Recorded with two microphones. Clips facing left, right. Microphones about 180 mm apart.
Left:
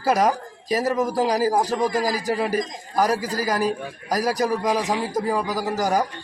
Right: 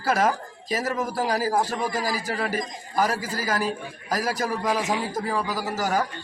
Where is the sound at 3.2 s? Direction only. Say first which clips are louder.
Left 4 dB; 40° left (ahead or behind).